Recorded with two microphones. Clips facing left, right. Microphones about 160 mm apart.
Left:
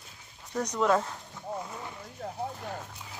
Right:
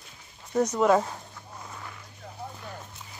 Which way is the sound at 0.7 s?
10° right (ahead or behind).